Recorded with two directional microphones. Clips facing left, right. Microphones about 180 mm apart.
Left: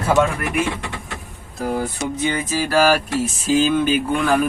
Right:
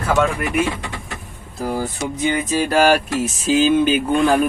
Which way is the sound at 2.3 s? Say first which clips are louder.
Right 4 dB; 20° right (ahead or behind).